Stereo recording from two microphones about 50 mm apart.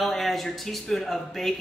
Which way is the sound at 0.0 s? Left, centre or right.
Centre.